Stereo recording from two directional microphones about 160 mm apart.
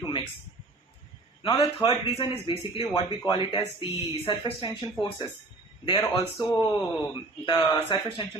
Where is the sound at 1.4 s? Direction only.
25° left (ahead or behind).